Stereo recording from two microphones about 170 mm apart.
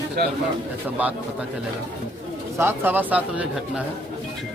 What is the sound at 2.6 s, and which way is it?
Speech, 10° right (ahead or behind).